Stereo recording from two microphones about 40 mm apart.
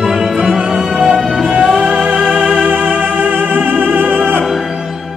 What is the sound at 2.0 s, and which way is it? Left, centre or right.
Music, centre.